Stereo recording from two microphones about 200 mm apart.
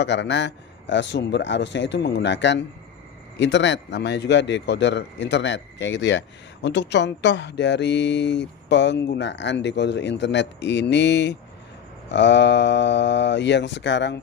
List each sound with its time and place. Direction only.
0.0 s speech: 60° left (ahead or behind)